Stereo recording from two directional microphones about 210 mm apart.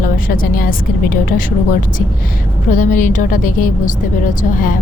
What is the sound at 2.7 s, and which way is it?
A woman's voice, 35° left (ahead or behind).